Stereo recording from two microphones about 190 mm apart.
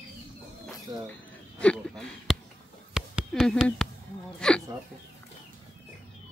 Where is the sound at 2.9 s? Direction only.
5° right (ahead or behind).